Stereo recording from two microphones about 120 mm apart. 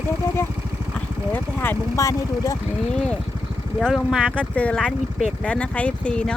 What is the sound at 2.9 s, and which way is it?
Speech, 5° left (ahead or behind).